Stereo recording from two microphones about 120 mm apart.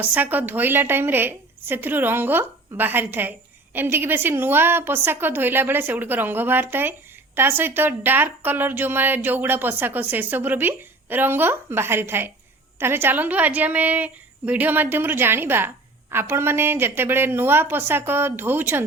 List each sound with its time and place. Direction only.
0.0 s a woman's voice: 15° right (ahead or behind)